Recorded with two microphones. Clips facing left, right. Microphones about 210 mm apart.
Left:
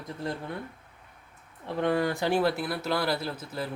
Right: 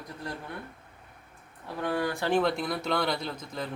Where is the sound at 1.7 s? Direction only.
20° left (ahead or behind).